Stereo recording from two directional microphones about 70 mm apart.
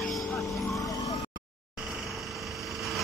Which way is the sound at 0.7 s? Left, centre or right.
Left.